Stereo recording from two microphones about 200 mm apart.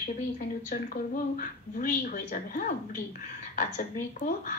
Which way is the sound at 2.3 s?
45° left (ahead or behind).